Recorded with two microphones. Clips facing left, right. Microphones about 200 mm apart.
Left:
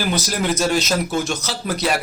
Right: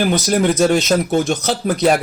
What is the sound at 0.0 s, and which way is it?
Speech, 50° right (ahead or behind).